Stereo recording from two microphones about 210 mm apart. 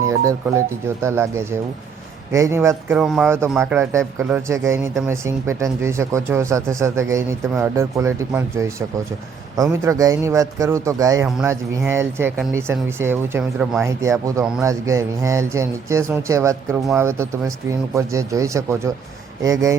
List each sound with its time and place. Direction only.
0.2 s speech: 15° right (ahead or behind)